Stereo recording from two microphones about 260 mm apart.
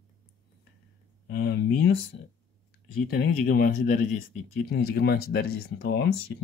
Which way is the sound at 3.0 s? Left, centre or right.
Left.